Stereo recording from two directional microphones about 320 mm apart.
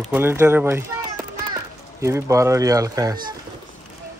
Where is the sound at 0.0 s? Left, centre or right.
Centre.